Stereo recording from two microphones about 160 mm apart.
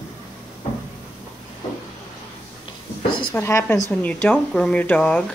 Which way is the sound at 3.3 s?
15° left (ahead or behind).